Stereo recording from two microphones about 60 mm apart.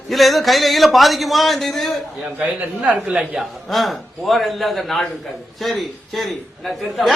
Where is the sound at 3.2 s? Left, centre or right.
Centre.